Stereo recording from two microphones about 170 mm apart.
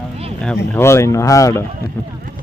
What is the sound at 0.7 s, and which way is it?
Speech, 15° left (ahead or behind).